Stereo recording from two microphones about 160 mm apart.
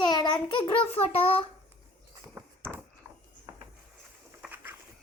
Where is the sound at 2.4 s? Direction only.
15° right (ahead or behind).